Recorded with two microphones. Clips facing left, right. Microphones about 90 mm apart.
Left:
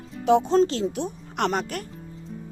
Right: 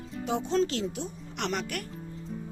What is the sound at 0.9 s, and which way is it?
Speech, 55° left (ahead or behind).